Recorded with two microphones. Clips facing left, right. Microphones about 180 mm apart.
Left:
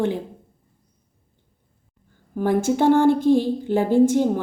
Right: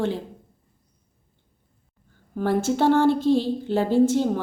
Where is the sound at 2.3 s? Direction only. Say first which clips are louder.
Left 2 dB; 15° left (ahead or behind).